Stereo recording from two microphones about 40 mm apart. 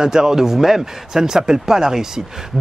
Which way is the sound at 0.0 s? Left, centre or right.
Centre.